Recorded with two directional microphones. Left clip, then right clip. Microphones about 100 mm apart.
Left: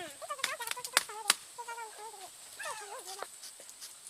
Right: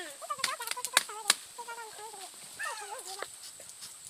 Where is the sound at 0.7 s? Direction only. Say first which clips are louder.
Right 2 dB; 20° right (ahead or behind).